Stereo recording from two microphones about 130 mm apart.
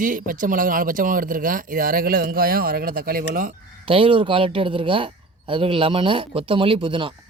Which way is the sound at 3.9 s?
40° right (ahead or behind).